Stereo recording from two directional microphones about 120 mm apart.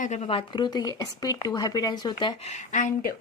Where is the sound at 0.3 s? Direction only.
45° left (ahead or behind).